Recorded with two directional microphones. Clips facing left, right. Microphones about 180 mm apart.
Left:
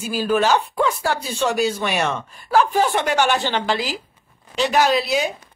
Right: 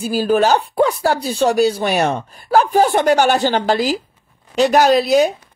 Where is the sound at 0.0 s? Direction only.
35° right (ahead or behind).